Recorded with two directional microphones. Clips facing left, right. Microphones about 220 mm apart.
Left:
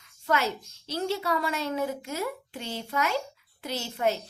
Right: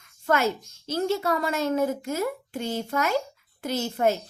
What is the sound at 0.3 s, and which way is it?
A child's voice, 50° right (ahead or behind).